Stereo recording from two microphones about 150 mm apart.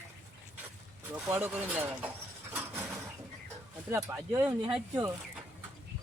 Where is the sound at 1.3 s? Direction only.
15° right (ahead or behind).